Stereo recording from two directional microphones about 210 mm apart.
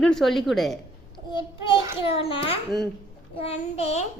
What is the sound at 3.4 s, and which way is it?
Child singing, 30° left (ahead or behind).